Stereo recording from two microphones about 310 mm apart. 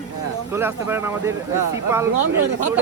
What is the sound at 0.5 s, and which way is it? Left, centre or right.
A man's voice, centre.